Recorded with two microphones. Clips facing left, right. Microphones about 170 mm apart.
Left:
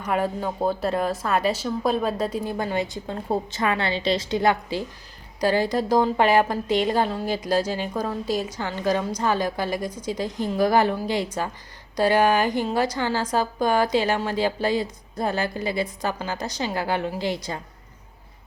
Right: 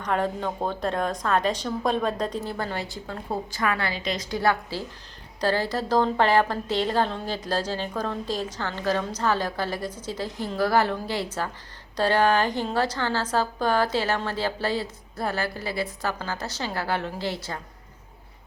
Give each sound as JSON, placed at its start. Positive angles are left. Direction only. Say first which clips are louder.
{"t": 0.0, "sound": "a woman's voice", "louder": "left 1 dB", "side_deg": 10}